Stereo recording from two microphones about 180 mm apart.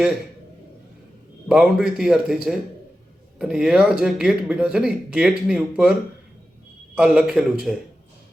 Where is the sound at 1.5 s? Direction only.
5° right (ahead or behind).